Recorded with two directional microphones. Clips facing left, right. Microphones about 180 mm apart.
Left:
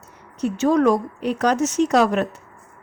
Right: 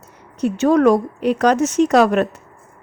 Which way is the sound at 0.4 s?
60° right (ahead or behind).